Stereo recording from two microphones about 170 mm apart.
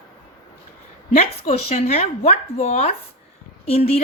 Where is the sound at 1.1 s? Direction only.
40° left (ahead or behind).